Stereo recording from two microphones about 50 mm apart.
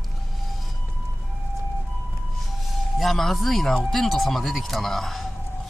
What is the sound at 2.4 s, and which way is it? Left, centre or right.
Music, centre.